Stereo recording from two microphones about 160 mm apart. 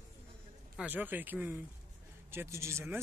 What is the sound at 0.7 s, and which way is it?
Speech, 10° right (ahead or behind).